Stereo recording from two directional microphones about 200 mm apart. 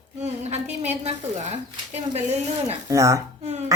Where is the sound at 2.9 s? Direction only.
15° right (ahead or behind).